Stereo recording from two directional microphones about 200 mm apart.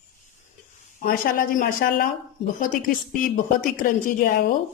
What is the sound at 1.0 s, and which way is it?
A woman's voice, 45° left (ahead or behind).